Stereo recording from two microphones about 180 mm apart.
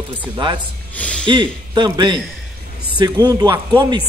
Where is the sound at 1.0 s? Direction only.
5° left (ahead or behind).